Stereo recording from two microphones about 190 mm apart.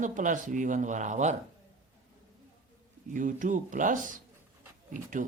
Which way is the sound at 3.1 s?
45° right (ahead or behind).